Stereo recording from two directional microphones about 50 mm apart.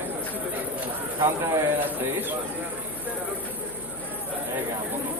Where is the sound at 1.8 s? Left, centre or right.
Right.